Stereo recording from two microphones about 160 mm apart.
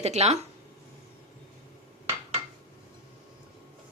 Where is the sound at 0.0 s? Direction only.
40° right (ahead or behind).